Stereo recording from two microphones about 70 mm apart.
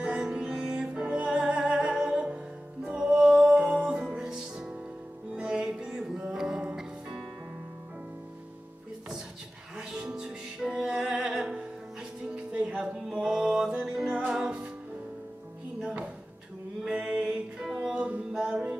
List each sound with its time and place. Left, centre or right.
0.0 s music: centre
9.8 s music: centre
15.8 s music: centre